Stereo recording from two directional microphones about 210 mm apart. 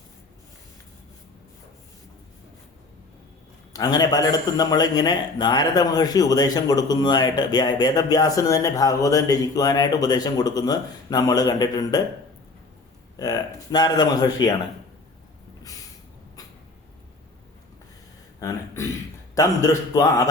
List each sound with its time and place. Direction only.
3.7 s speech: 20° left (ahead or behind)
13.1 s speech: 15° left (ahead or behind)
18.3 s speech: 15° left (ahead or behind)